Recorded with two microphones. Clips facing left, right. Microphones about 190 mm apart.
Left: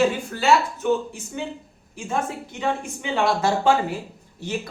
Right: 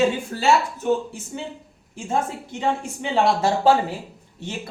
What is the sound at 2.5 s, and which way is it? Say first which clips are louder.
A woman's voice: right 2 dB; 30° right (ahead or behind).